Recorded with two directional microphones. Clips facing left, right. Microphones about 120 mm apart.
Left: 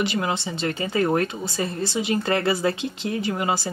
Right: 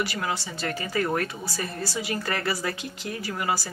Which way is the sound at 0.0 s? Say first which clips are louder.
Left 4 dB; 20° left (ahead or behind).